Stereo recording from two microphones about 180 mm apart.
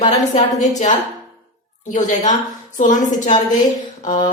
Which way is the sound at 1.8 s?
45° left (ahead or behind).